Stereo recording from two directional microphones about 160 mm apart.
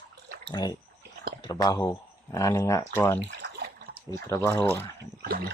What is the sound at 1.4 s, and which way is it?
Speech, 25° left (ahead or behind).